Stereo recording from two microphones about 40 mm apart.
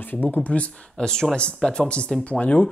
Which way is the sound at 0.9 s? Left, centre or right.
Centre.